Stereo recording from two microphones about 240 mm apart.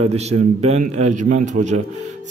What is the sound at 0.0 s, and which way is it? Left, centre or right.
A man's voice, right.